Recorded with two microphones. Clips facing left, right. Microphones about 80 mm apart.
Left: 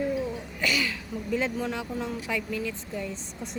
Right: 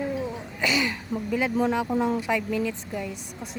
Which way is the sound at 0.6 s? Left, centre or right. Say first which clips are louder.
Right 3 dB; right.